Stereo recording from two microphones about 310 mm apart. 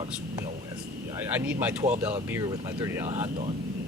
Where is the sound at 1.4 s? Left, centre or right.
Centre.